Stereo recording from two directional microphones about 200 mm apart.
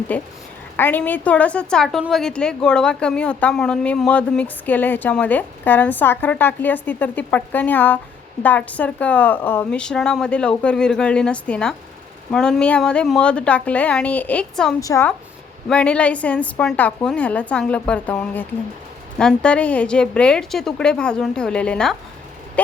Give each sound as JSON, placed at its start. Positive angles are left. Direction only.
{"t": 0.1, "sound": "a woman's voice", "side_deg": 10}
{"t": 14.8, "sound": "a woman's voice", "side_deg": 15}